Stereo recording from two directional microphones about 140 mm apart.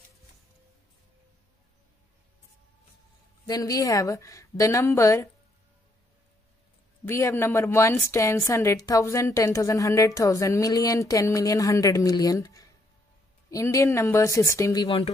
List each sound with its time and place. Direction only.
3.4 s a woman's voice: 25° left (ahead or behind)
7.1 s a woman's voice: 20° left (ahead or behind)